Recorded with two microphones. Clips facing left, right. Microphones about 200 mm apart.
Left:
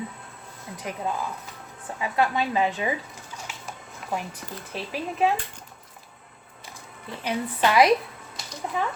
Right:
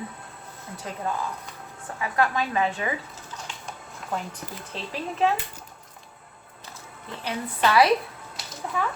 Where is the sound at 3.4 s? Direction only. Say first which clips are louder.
Even; 5° left (ahead or behind).